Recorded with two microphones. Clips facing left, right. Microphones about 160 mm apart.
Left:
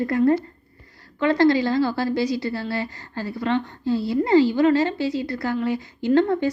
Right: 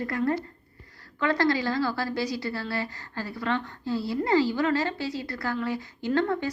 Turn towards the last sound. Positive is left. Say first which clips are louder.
# left 7 dB
turn(degrees=25)  # may be behind; listen again after turning